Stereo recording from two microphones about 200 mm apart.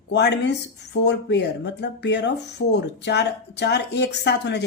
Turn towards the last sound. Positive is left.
turn(degrees=60)  # may be behind; listen again after turning